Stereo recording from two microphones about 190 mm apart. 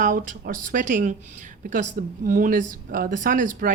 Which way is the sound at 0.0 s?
45° right (ahead or behind).